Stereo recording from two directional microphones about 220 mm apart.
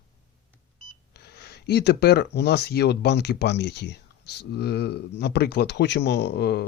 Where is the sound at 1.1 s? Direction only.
50° left (ahead or behind).